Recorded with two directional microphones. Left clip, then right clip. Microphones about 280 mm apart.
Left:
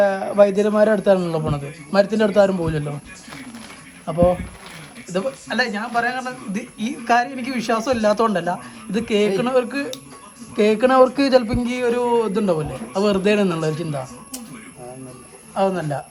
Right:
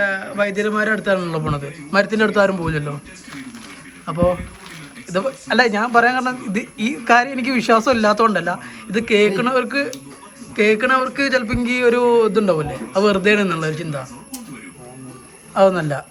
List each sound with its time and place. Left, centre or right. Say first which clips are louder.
0.0 s a man's voice: left 4 dB; centre
4.0 s speech: left 1 dB; centre
15.5 s speech: right 6 dB; centre